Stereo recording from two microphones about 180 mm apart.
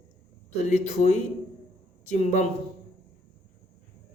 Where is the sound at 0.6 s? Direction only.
40° left (ahead or behind).